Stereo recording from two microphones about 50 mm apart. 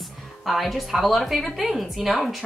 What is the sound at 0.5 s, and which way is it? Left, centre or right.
Speech, centre.